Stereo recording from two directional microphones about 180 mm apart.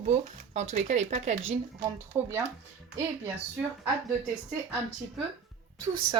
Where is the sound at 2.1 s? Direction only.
10° right (ahead or behind).